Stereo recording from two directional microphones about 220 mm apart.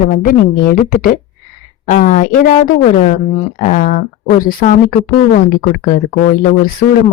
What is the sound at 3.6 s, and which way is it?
A woman's voice, 35° left (ahead or behind).